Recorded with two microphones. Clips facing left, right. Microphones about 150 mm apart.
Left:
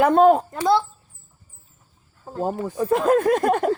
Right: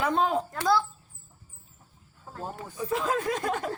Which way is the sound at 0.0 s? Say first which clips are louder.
Left 12 dB; 55° left (ahead or behind).